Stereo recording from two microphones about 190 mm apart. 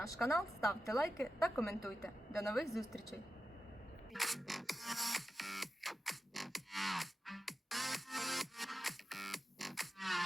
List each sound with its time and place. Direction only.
0.3 s a woman's voice: centre (ahead or behind)
0.9 s a woman's voice: 15° left (ahead or behind)
1.5 s a woman's voice: centre (ahead or behind)
4.1 s music: centre (ahead or behind)